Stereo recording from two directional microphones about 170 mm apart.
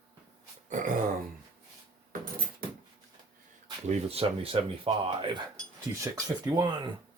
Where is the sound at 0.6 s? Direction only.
50° right (ahead or behind).